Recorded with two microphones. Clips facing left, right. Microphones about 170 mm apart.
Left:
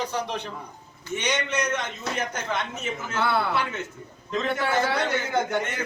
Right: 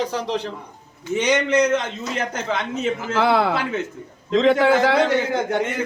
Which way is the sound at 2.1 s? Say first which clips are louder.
Right 5 dB; 90° right.